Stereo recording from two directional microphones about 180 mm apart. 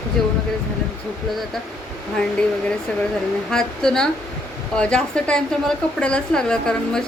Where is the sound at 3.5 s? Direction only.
5° left (ahead or behind).